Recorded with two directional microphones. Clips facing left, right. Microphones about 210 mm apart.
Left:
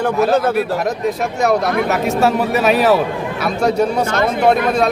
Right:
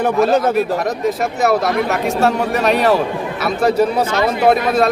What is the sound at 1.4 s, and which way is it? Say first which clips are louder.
A man's voice: left 1 dB; centre (ahead or behind).